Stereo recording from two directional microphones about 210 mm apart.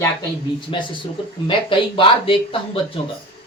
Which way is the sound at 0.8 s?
20° left (ahead or behind).